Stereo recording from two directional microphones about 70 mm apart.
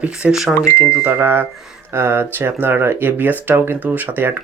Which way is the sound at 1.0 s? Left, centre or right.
Right.